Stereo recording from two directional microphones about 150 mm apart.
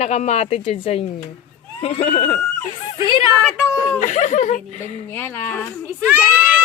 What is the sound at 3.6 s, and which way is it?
Speech, 20° left (ahead or behind).